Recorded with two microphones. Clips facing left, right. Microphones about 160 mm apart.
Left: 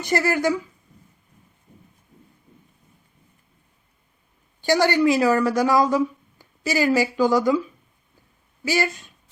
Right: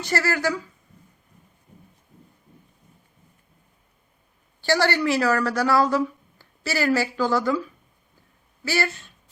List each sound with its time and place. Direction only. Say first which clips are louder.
0.0 s speech: left 3 dB; 20° left (ahead or behind)
4.6 s a woman's voice: left 3 dB; 15° left (ahead or behind)
8.6 s a woman's voice: left 2 dB; 15° left (ahead or behind)